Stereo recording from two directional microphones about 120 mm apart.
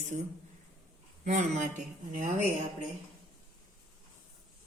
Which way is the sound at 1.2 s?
80° right.